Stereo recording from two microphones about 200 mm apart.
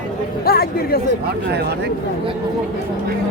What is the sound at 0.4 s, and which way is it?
Speech, 50° left (ahead or behind).